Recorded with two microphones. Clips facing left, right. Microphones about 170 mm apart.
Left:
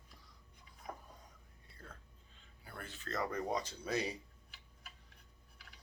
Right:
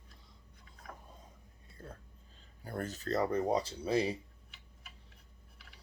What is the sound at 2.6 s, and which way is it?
Speech, 40° right (ahead or behind).